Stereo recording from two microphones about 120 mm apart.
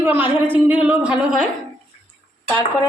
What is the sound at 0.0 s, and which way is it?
Speech, 15° right (ahead or behind).